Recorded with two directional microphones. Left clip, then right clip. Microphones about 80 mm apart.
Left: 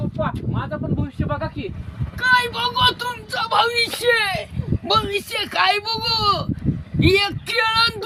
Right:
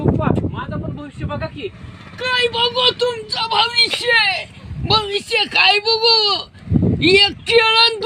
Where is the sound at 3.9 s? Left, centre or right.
Left.